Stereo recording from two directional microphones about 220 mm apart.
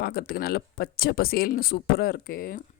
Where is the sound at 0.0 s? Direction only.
45° left (ahead or behind).